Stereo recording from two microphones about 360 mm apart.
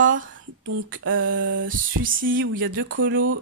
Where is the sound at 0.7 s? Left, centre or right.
Right.